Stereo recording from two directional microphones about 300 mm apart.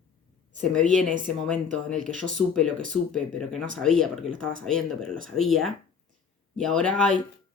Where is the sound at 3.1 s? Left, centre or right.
Centre.